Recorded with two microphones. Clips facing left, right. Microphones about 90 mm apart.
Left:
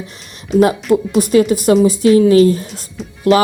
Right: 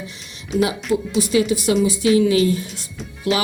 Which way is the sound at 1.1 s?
50° left (ahead or behind).